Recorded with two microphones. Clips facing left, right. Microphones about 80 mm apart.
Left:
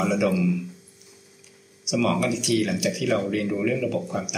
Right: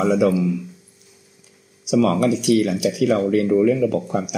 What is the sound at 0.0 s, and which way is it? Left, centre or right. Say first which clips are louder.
Speech: right 5 dB; right.